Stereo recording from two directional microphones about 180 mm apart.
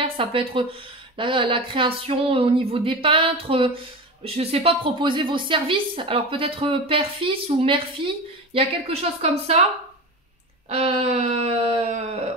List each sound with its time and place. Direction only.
0.0 s a woman's voice: 30° right (ahead or behind)
10.7 s a woman's voice: 35° right (ahead or behind)